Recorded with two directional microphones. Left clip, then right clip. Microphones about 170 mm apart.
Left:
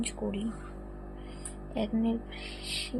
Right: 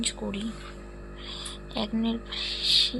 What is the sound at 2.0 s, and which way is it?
Speech, centre (ahead or behind).